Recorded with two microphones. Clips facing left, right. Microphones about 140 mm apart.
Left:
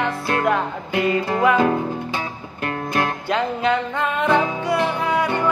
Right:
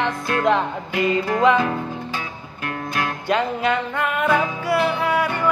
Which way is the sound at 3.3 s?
10° right (ahead or behind).